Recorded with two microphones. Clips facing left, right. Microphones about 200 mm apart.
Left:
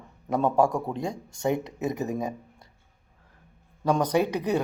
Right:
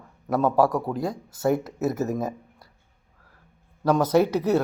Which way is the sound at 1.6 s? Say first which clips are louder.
Right 4 dB; 15° left (ahead or behind).